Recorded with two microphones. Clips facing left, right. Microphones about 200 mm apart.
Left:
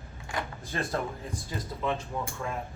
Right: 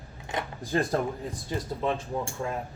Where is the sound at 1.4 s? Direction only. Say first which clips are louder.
Right 3 dB; 30° right (ahead or behind).